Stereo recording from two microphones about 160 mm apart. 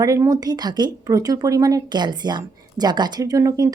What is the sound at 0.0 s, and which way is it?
Speech, 20° right (ahead or behind).